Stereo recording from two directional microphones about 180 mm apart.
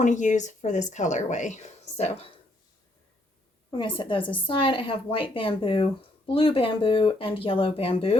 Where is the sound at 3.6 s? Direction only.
25° left (ahead or behind).